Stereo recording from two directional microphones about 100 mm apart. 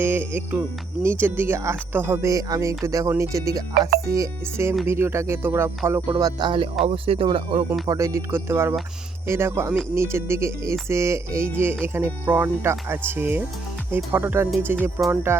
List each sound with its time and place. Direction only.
0.0 s speech: 20° right (ahead or behind)
6.1 s speech: 35° right (ahead or behind)
6.8 s speech: 70° right (ahead or behind)
7.9 s speech: 35° right (ahead or behind)